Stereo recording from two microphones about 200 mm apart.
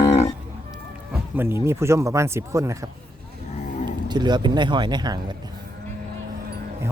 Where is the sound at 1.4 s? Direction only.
10° right (ahead or behind).